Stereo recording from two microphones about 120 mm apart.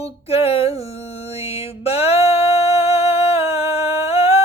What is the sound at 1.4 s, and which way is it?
Music, 55° left (ahead or behind).